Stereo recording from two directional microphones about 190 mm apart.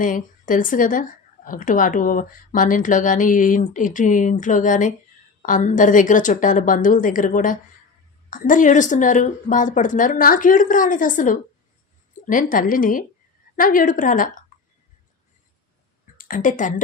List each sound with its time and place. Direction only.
0.0 s a woman's voice: 45° left (ahead or behind)
16.1 s a woman's voice: 45° left (ahead or behind)